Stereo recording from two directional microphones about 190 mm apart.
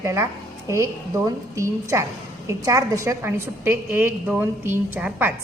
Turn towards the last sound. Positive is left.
turn(degrees=-10)  # may be behind; listen again after turning